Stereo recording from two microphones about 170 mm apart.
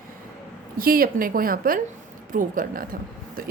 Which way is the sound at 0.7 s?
55° right (ahead or behind).